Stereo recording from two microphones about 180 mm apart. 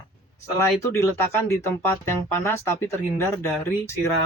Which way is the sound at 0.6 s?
15° left (ahead or behind).